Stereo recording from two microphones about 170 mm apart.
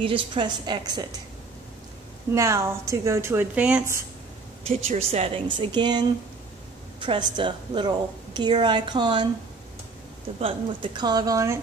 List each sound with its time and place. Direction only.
0.0 s a woman's voice: 30° right (ahead or behind)
2.3 s a woman's voice: 15° right (ahead or behind)
4.6 s a woman's voice: 40° right (ahead or behind)
10.4 s a woman's voice: 25° right (ahead or behind)